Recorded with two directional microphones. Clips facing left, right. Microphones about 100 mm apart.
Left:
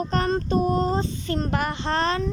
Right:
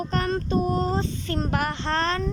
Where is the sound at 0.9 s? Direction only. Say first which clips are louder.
Left 1 dB; centre (ahead or behind).